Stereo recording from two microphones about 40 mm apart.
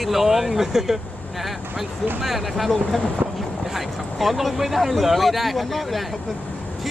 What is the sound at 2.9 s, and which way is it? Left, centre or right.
Speech, centre.